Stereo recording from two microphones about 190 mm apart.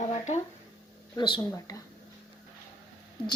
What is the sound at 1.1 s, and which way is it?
Speech, 20° left (ahead or behind).